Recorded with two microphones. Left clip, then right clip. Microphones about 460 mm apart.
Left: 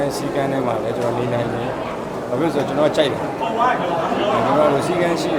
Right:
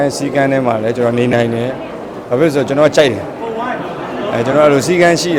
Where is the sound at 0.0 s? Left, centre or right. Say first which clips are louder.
Right 7 dB; right.